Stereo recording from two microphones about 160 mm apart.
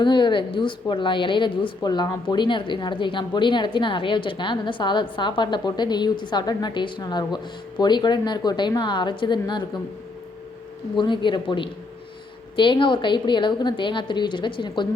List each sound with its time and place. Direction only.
0.0 s a woman's voice: 30° left (ahead or behind)
10.9 s a woman's voice: 30° left (ahead or behind)